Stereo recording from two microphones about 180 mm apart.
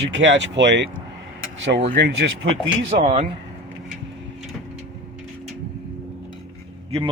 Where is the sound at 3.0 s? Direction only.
40° right (ahead or behind).